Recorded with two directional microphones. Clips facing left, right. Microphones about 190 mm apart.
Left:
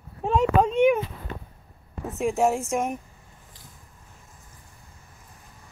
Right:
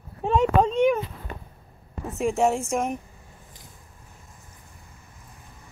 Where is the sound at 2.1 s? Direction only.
Centre (ahead or behind).